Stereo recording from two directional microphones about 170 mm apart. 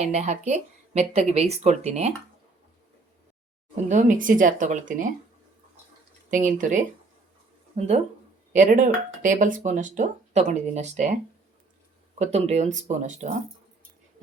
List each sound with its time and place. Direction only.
0.0 s speech: 40° right (ahead or behind)
3.8 s speech: 50° right (ahead or behind)
6.3 s speech: 50° right (ahead or behind)
12.2 s speech: 40° right (ahead or behind)